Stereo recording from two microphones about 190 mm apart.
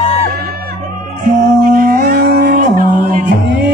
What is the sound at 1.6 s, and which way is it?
Dog, 45° right (ahead or behind).